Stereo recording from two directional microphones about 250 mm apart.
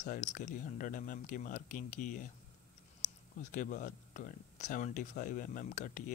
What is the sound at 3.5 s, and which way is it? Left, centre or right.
Speech, left.